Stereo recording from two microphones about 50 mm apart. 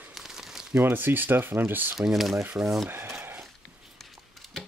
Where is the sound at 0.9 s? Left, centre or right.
Right.